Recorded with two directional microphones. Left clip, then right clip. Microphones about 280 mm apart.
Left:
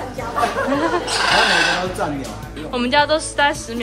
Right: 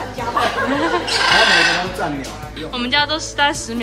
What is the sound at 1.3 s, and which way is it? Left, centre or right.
Speech, left.